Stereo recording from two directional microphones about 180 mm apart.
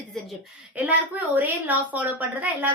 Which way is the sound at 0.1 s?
5° right (ahead or behind).